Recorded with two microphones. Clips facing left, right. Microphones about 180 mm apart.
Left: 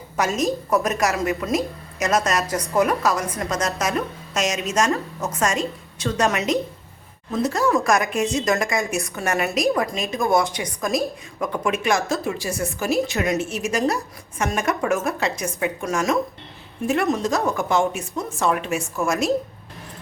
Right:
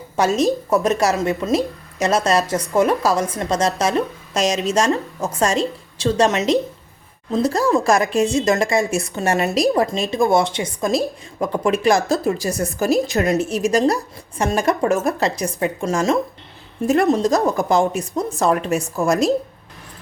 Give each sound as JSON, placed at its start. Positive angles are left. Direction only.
{"t": 0.2, "sound": "a woman's voice", "side_deg": -30}